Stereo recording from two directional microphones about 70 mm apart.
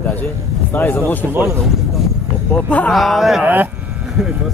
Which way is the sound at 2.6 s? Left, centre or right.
Centre.